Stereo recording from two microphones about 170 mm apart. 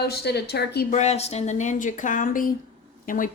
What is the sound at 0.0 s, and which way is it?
Speech, 75° left (ahead or behind).